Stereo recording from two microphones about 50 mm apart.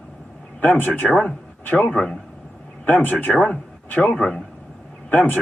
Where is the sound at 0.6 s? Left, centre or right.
Left.